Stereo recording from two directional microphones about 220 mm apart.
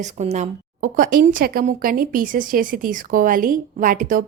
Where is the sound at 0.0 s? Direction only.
30° right (ahead or behind).